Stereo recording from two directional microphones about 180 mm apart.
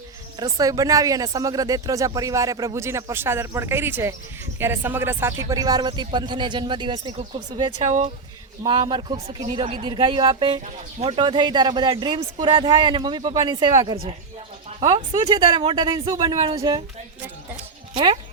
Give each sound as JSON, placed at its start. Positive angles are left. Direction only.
{"t": 0.3, "sound": "speech", "side_deg": -20}
{"t": 7.8, "sound": "speech", "side_deg": -35}
{"t": 8.9, "sound": "speech", "side_deg": -25}
{"t": 17.9, "sound": "speech", "side_deg": -25}